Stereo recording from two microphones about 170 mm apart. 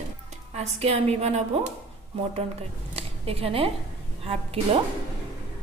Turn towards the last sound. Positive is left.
turn(degrees=-35)  # may be behind; listen again after turning